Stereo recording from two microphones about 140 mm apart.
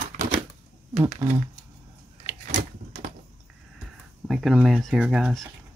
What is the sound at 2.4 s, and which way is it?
Keys jangling, 65° right (ahead or behind).